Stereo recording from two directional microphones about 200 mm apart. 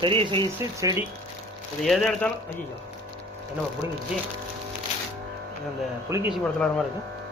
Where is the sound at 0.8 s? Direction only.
15° right (ahead or behind).